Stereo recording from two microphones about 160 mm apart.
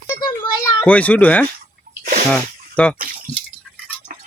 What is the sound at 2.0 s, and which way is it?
Sneeze, 60° right (ahead or behind).